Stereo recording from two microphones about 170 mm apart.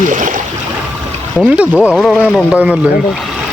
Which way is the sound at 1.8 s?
Centre (ahead or behind).